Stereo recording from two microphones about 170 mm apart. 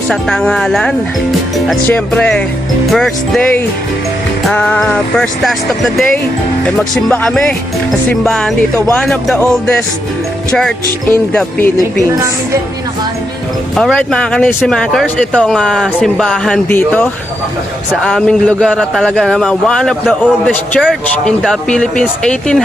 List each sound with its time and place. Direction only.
0.1 s speech: 5° left (ahead or behind)
11.1 s speech: 15° left (ahead or behind)
13.7 s speech: 5° left (ahead or behind)
16.6 s speech: 10° left (ahead or behind)